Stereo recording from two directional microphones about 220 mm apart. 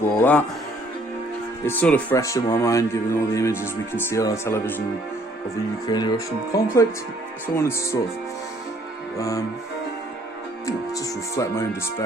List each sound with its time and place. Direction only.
0.2 s speech: 5° left (ahead or behind)
1.6 s speech: 10° left (ahead or behind)
5.9 s speech: 20° left (ahead or behind)
9.1 s speech: 15° left (ahead or behind)
10.7 s speech: 15° left (ahead or behind)